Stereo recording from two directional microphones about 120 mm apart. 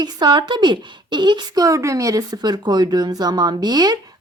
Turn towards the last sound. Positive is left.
turn(degrees=-35)  # may be behind; listen again after turning